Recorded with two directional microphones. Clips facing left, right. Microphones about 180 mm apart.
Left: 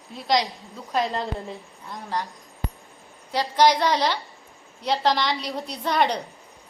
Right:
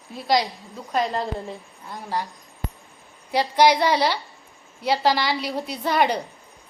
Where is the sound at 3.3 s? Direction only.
10° right (ahead or behind).